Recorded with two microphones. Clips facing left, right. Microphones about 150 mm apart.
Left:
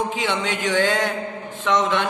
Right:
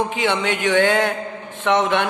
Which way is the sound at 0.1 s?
60° right (ahead or behind).